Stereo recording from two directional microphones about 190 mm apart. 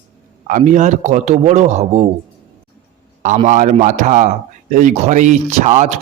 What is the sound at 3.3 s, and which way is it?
Speech, 40° right (ahead or behind).